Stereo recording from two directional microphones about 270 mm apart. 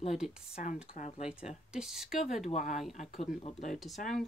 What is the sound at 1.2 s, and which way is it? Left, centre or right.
Speech, centre.